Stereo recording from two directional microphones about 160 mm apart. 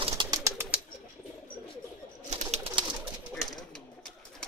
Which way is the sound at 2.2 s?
40° right (ahead or behind).